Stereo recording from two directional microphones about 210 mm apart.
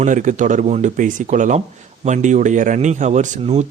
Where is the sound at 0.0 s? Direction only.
35° right (ahead or behind).